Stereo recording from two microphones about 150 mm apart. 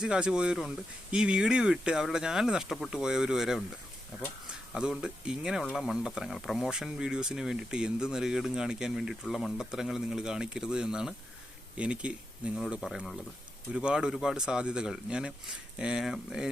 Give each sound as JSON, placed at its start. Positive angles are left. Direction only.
{"t": 0.0, "sound": "speech", "side_deg": -5}
{"t": 4.7, "sound": "speech", "side_deg": -5}